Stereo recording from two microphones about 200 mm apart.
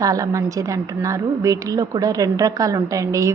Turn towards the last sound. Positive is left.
turn(degrees=-15)  # may be behind; listen again after turning